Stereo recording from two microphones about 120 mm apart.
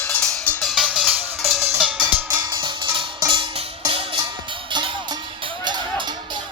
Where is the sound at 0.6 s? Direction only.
5° right (ahead or behind).